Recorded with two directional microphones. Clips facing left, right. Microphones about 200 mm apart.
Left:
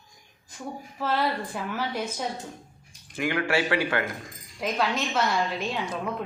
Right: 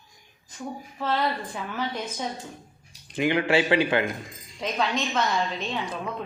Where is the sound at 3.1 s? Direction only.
20° right (ahead or behind).